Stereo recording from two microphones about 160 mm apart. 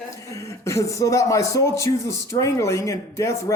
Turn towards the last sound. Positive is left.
turn(degrees=20)  # may be behind; listen again after turning